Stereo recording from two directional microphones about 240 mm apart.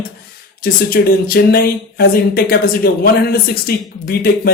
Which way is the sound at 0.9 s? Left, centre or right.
Left.